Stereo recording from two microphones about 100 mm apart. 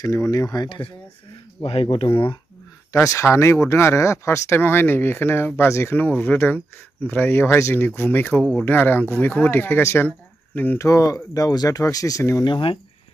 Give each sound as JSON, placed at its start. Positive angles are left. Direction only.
{"t": 0.0, "sound": "speech", "side_deg": 35}
{"t": 0.7, "sound": "speech", "side_deg": 60}
{"t": 1.6, "sound": "speech", "side_deg": 85}
{"t": 2.9, "sound": "speech", "side_deg": 30}
{"t": 10.8, "sound": "speech", "side_deg": 30}
{"t": 12.4, "sound": "speech", "side_deg": 55}